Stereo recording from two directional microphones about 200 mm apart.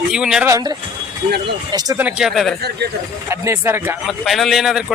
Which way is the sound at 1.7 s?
15° right (ahead or behind).